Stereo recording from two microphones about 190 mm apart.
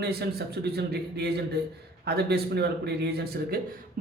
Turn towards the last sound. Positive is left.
turn(degrees=-60)  # may be behind; listen again after turning